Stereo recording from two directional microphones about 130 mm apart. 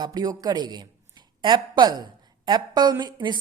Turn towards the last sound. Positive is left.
turn(degrees=-35)  # may be behind; listen again after turning